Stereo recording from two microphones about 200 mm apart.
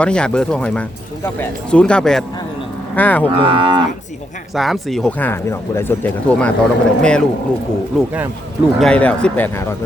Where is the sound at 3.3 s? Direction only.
25° right (ahead or behind).